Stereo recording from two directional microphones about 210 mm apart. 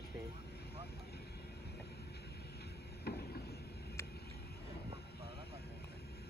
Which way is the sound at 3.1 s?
50° left (ahead or behind).